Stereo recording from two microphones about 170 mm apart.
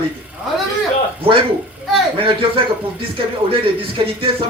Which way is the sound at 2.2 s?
30° right (ahead or behind).